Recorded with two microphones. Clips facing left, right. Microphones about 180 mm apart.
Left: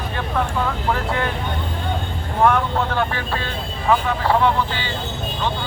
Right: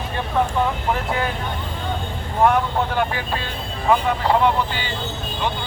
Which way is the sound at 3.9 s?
15° right (ahead or behind).